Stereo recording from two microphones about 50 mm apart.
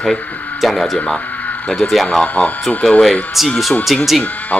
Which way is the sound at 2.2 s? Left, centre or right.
Left.